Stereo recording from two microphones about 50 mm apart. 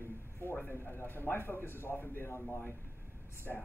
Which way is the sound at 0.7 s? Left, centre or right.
Left.